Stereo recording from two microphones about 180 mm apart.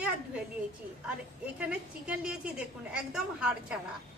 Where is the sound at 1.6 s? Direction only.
5° right (ahead or behind).